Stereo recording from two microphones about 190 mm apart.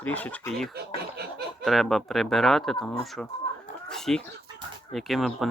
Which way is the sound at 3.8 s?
5° left (ahead or behind).